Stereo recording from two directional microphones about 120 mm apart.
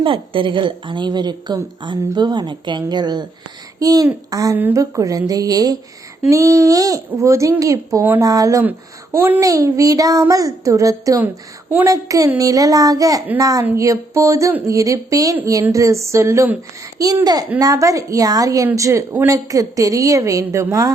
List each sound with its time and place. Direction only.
0.0 s a woman's voice: 45° right (ahead or behind); by 4.5 s 30° right (ahead or behind)
4.5 s a woman's voice: 15° right (ahead or behind)
4.8 s a child's voice: 30° right (ahead or behind)